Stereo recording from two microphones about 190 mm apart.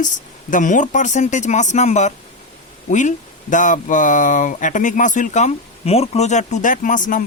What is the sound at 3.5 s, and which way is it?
Speech, 40° left (ahead or behind).